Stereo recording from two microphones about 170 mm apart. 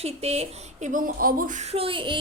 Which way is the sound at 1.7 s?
30° right (ahead or behind).